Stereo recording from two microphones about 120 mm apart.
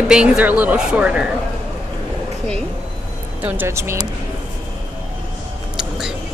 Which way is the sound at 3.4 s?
15° right (ahead or behind).